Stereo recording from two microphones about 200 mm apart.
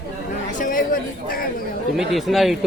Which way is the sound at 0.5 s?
40° left (ahead or behind).